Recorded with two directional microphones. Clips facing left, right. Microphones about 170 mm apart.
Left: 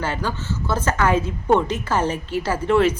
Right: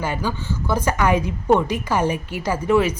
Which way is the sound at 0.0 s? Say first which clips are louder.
Right 1 dB; 10° right (ahead or behind).